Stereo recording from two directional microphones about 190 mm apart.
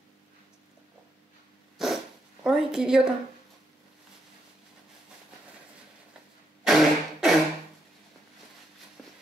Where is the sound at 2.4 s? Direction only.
5° right (ahead or behind).